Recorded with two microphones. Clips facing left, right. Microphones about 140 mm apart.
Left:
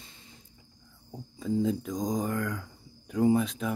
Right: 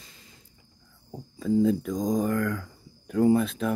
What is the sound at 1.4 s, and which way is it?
Speech, 20° left (ahead or behind).